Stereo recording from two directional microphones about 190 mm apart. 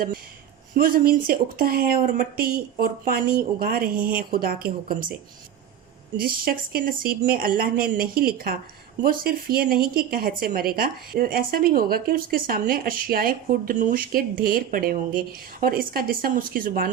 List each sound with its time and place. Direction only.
0.7 s a woman's voice: 50° right (ahead or behind)
6.1 s a woman's voice: 50° right (ahead or behind)